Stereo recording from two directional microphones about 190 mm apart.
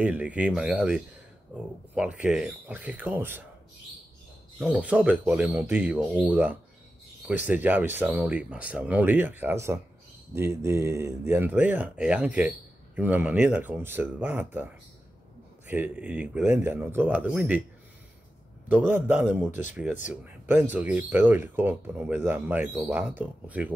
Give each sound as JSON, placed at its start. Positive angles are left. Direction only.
{"t": 0.0, "sound": "speech", "side_deg": -10}
{"t": 4.6, "sound": "speech", "side_deg": -5}
{"t": 15.7, "sound": "speech", "side_deg": -10}
{"t": 18.7, "sound": "speech", "side_deg": -10}